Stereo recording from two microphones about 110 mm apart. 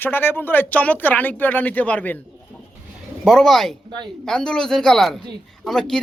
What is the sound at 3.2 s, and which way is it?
Speech, 5° left (ahead or behind).